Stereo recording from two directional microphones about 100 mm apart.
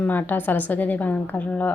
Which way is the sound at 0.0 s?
20° left (ahead or behind).